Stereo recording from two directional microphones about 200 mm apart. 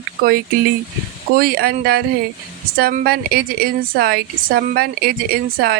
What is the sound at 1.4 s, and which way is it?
A woman's voice, 50° right (ahead or behind).